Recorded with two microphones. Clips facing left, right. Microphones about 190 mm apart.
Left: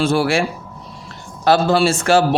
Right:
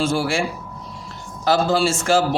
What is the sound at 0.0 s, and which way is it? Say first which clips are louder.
Speech: left 4 dB; 65° left (ahead or behind).